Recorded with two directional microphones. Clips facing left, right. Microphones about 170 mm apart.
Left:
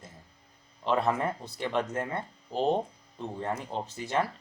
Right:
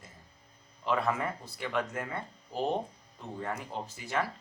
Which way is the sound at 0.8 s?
30° left (ahead or behind).